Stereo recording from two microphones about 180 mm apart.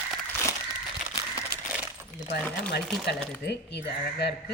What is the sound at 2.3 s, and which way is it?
Speech, 65° left (ahead or behind).